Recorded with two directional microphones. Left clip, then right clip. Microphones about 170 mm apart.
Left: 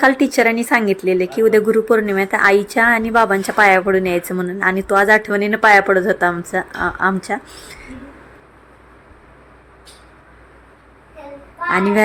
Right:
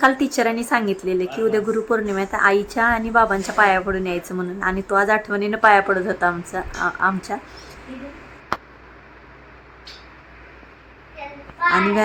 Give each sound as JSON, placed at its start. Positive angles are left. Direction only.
{"t": 0.0, "sound": "a woman's voice", "side_deg": 15}